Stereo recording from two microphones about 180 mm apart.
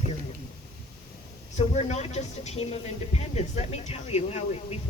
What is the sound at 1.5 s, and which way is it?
Speech, 40° left (ahead or behind).